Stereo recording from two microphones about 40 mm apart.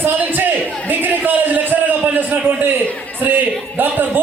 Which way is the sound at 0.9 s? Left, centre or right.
Right.